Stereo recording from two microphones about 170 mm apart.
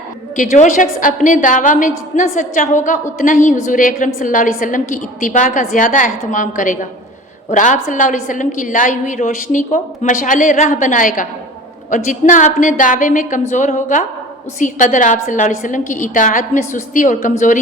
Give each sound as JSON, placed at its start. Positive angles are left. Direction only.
{"t": 0.3, "sound": "a woman's voice", "side_deg": 50}